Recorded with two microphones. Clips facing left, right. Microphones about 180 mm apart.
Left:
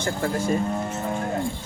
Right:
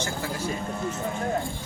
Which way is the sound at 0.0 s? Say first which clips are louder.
Left 5 dB; 50° left (ahead or behind).